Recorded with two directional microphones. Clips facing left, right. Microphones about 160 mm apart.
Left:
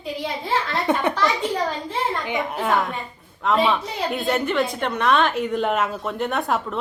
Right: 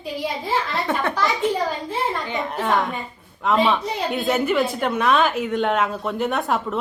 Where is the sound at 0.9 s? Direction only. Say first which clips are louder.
Left 3 dB; 15° left (ahead or behind).